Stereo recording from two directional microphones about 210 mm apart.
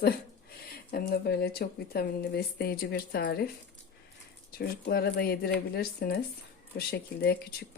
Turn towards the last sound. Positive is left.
turn(degrees=50)  # may be behind; listen again after turning